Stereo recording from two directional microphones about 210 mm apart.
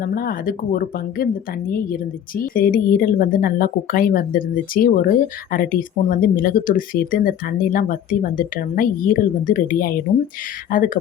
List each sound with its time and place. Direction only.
0.0 s a woman's voice: 45° left (ahead or behind)